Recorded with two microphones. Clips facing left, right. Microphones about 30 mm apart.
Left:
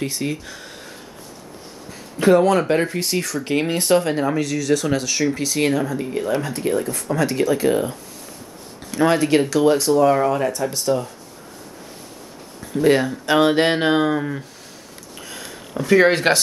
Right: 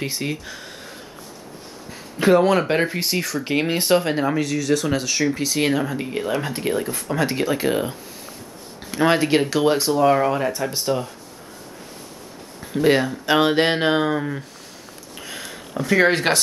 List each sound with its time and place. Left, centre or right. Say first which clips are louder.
0.0 s speech: left 1 dB; centre
12.7 s speech: left 1 dB; centre
15.1 s a sound: right 1 dB; centre